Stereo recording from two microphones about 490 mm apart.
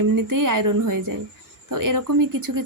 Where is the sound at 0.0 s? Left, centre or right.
Right.